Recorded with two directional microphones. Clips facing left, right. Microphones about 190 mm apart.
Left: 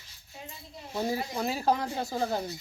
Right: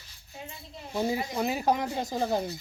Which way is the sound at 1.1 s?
15° right (ahead or behind).